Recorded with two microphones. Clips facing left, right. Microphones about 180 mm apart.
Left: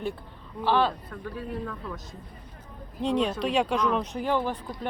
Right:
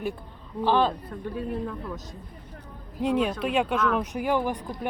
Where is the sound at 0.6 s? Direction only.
15° right (ahead or behind).